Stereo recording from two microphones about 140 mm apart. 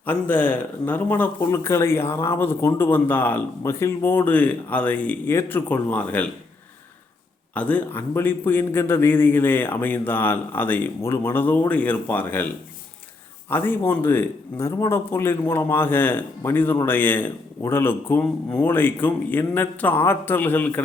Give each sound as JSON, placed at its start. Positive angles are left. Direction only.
{"t": 0.0, "sound": "speech", "side_deg": 10}
{"t": 7.5, "sound": "speech", "side_deg": 10}
{"t": 13.5, "sound": "speech", "side_deg": 15}